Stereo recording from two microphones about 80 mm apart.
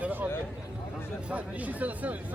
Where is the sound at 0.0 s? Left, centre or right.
Right.